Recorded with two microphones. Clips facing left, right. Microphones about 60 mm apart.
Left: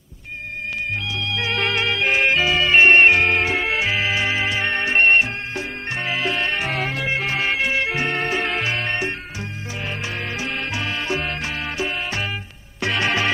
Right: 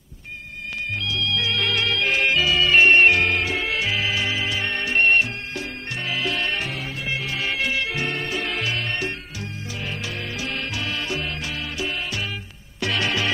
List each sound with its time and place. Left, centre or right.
1.1 s music: left
6.7 s music: left
7.2 s music: left